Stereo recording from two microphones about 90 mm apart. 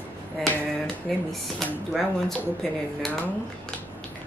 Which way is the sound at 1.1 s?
5° left (ahead or behind).